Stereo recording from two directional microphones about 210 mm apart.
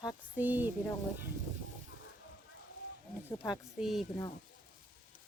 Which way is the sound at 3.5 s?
Centre (ahead or behind).